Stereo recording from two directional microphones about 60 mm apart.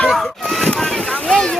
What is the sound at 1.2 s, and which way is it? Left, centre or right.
Speech, centre.